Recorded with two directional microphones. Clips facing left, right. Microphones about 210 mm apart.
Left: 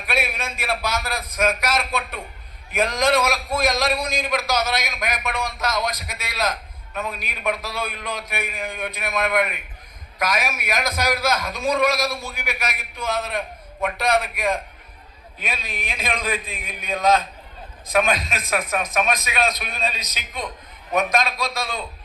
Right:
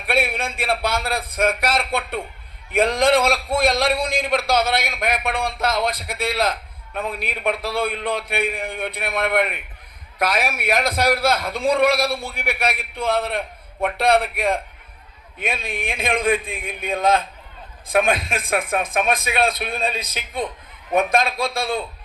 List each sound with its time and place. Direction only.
0.1 s a man's voice: 30° right (ahead or behind)
15.6 s a man's voice: 25° right (ahead or behind)